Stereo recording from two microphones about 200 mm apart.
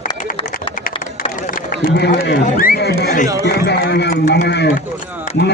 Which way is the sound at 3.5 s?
55° left (ahead or behind).